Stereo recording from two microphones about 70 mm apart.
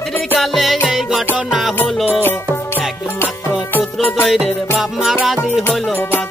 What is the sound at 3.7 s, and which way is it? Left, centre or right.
Music, left.